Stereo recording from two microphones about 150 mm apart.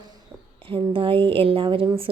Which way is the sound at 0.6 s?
35° right (ahead or behind).